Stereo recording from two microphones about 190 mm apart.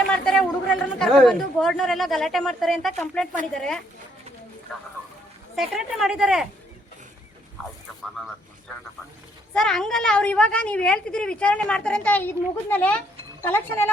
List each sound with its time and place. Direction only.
0.1 s a woman's voice: 5° left (ahead or behind)
5.5 s a woman's voice: centre (ahead or behind)
9.6 s a woman's voice: 5° left (ahead or behind)